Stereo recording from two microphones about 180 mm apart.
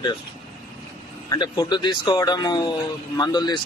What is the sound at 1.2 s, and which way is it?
A man's voice, 25° left (ahead or behind).